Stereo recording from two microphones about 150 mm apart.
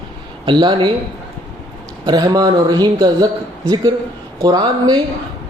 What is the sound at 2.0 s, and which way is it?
Speech, 25° right (ahead or behind).